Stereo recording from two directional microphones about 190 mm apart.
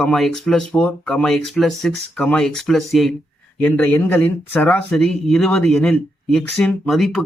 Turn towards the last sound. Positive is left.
turn(degrees=0)  # may be behind; listen again after turning